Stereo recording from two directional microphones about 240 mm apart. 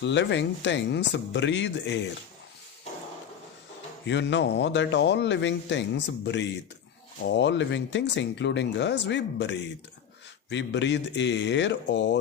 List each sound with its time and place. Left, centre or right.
0.0 s speech: left
4.0 s speech: left